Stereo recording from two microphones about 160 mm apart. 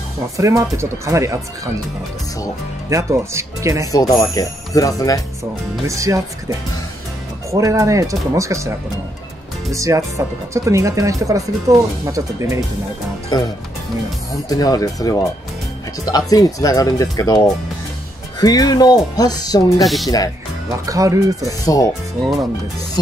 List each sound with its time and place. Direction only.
0.4 s speech: 20° right (ahead or behind)
2.9 s speech: 20° right (ahead or behind)
3.9 s speech: 20° left (ahead or behind)
5.4 s speech: 20° right (ahead or behind)
7.5 s speech: 20° right (ahead or behind)
13.3 s speech: 30° left (ahead or behind)
14.5 s speech: 25° left (ahead or behind)
18.4 s speech: 25° left (ahead or behind)
19.8 s speech: centre (ahead or behind)
20.8 s speech: 20° right (ahead or behind)
21.5 s speech: 20° left (ahead or behind)